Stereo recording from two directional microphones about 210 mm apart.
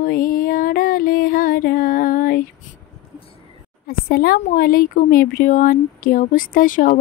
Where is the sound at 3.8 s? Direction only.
45° left (ahead or behind).